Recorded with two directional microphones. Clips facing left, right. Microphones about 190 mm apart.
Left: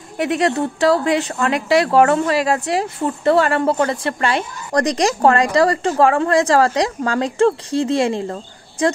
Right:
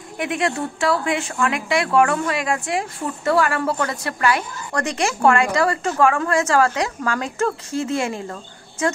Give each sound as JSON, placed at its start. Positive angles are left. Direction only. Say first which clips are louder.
{"t": 0.2, "sound": "speech", "louder": "left 5 dB", "side_deg": 40}